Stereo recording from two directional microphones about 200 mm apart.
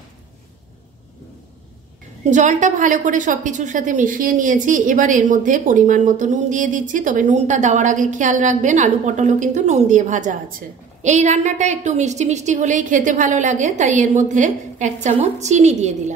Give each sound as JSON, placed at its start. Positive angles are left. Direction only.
{"t": 2.2, "sound": "a woman's voice", "side_deg": -35}